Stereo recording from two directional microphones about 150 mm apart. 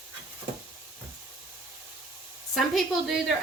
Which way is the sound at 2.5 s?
Centre (ahead or behind).